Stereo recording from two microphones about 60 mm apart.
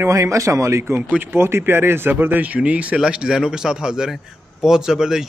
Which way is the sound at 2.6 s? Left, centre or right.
Right.